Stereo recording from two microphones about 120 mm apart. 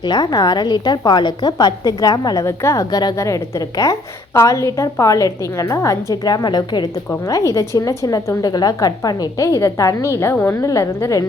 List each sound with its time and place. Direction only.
0.0 s a woman's voice: 35° left (ahead or behind)